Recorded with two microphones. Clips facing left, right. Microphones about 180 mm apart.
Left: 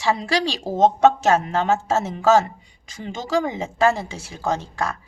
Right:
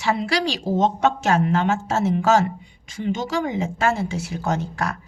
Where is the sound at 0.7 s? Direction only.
40° left (ahead or behind).